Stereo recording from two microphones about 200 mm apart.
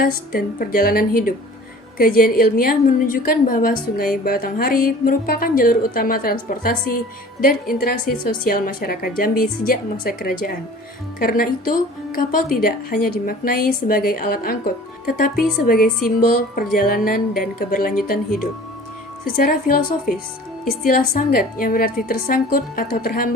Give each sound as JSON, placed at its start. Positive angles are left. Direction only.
{"t": 0.0, "sound": "a woman's voice", "side_deg": 45}
{"t": 20.8, "sound": "a woman's voice", "side_deg": 45}